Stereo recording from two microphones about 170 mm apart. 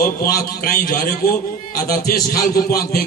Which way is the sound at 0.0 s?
55° left (ahead or behind).